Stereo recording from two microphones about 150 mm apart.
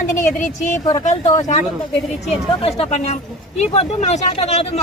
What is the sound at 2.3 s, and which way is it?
Speech, 45° left (ahead or behind).